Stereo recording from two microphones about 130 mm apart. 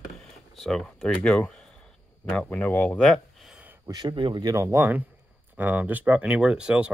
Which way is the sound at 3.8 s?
30° right (ahead or behind).